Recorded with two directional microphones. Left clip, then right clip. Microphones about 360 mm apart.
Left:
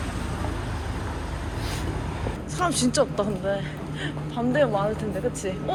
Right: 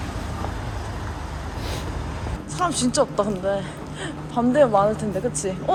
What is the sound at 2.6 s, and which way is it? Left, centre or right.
A woman's voice, centre.